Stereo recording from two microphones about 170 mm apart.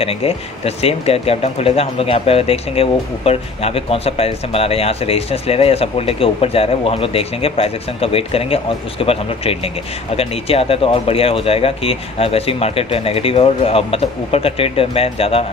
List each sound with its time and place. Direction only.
0.0 s speech: 35° left (ahead or behind)